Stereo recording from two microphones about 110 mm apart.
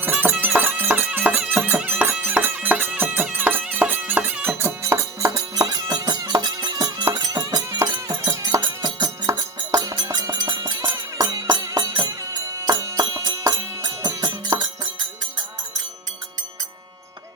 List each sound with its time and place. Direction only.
0.0 s music: 20° right (ahead or behind); by 14.6 s 35° right (ahead or behind)